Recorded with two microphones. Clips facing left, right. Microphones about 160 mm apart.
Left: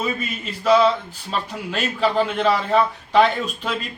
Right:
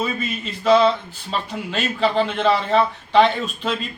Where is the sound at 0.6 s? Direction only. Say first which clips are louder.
Right 1 dB; 5° left (ahead or behind).